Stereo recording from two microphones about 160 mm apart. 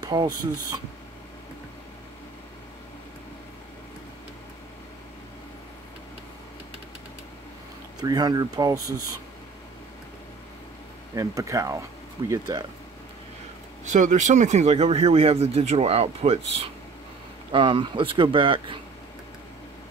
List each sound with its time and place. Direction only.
0.0 s speech: 25° right (ahead or behind)
8.0 s speech: 25° right (ahead or behind)
11.1 s speech: 20° right (ahead or behind)
13.8 s speech: 50° right (ahead or behind); by 18.8 s 30° right (ahead or behind)